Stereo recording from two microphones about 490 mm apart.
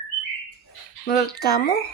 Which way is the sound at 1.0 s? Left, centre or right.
Centre.